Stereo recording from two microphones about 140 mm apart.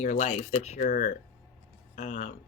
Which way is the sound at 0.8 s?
70° left (ahead or behind).